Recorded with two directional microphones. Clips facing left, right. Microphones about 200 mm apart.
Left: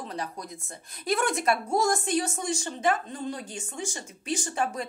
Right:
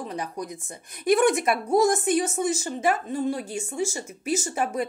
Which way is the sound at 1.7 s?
Centre (ahead or behind).